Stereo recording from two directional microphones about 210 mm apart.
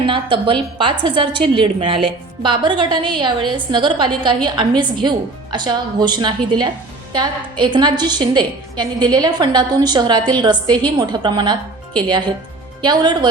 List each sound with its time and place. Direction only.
0.0 s a woman's voice: 25° right (ahead or behind)